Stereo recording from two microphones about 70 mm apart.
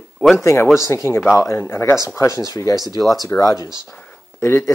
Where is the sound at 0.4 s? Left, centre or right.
Left.